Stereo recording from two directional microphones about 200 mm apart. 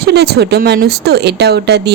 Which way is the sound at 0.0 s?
55° right (ahead or behind).